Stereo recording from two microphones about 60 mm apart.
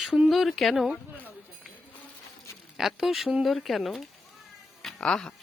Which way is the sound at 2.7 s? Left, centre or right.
Centre.